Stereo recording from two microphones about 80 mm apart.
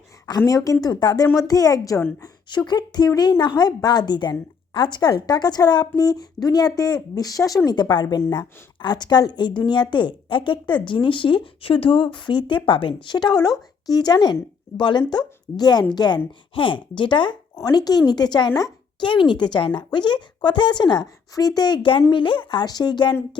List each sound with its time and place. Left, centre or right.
0.3 s a woman's voice: left
2.2 s a woman's voice: left
7.8 s speech: left
14.8 s speech: left
15.5 s a woman's voice: left
17.5 s a woman's voice: left
22.1 s speech: left